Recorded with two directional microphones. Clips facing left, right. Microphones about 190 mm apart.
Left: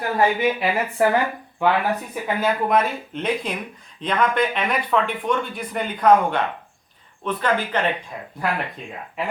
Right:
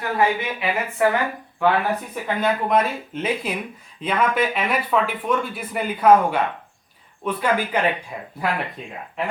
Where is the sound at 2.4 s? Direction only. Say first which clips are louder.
Even; centre (ahead or behind).